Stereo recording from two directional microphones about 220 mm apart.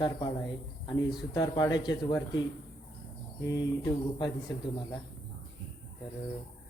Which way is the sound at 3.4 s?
15° left (ahead or behind).